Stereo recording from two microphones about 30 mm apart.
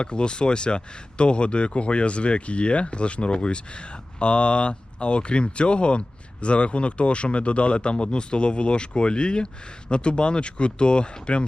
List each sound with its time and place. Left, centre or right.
0.0 s speech: left